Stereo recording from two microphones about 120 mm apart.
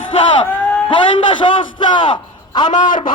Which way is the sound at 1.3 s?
40° left (ahead or behind).